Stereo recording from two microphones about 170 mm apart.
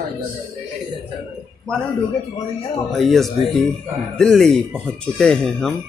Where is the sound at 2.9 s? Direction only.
Centre (ahead or behind).